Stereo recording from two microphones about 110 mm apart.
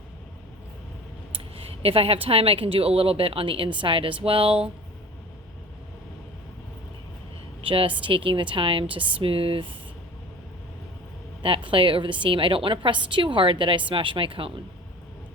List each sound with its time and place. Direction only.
1.3 s speech: 60° right (ahead or behind)
7.6 s a woman's voice: 55° right (ahead or behind)
11.4 s a woman's voice: 55° right (ahead or behind)